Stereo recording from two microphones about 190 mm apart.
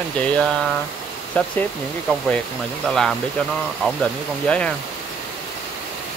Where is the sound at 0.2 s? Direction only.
5° left (ahead or behind).